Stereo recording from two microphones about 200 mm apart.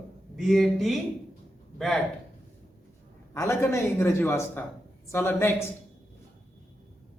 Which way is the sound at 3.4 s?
15° left (ahead or behind).